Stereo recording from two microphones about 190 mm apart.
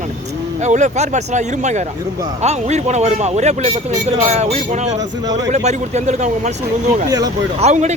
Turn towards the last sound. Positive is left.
turn(degrees=-35)  # may be behind; listen again after turning